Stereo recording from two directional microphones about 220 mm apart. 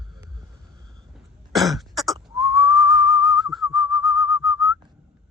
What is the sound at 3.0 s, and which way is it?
Whistling, 20° right (ahead or behind).